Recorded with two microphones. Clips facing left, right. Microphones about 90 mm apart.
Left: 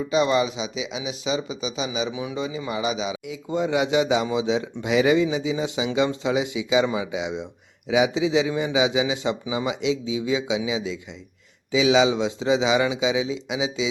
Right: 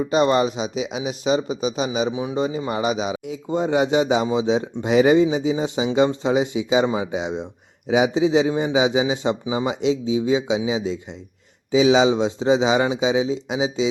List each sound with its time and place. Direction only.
0.0 s speech: 45° right (ahead or behind)
3.5 s speech: 35° right (ahead or behind)